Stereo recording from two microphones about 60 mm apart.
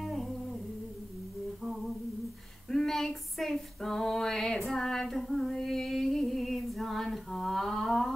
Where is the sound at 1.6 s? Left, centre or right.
Centre.